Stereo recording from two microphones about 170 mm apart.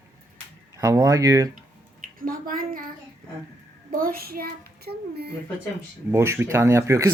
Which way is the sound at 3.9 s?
55° right (ahead or behind).